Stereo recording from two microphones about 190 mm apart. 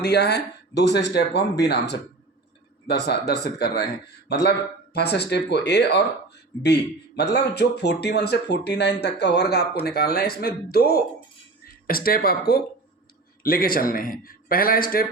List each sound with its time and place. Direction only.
0.0 s speech: 60° left (ahead or behind)
7.3 s a man's voice: 60° left (ahead or behind)